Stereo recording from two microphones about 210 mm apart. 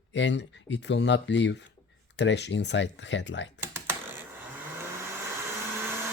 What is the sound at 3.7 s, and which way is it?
Typing, 10° right (ahead or behind).